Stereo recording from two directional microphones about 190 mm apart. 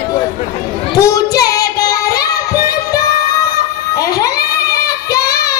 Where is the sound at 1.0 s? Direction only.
20° left (ahead or behind).